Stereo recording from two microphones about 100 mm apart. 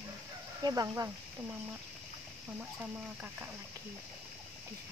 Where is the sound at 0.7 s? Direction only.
35° right (ahead or behind).